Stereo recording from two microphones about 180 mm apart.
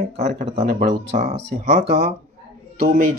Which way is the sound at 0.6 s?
50° right (ahead or behind).